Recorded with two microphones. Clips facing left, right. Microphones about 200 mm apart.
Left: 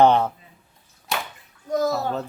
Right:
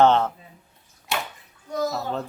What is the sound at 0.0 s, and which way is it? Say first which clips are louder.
Speech: left 1 dB; 15° left (ahead or behind).